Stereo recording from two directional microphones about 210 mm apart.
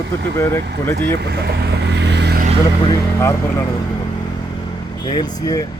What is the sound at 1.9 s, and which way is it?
Vehicle, 55° right (ahead or behind).